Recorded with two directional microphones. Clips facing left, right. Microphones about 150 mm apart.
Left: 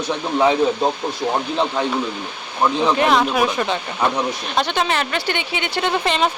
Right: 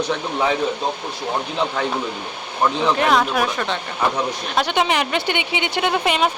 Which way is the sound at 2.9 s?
Centre (ahead or behind).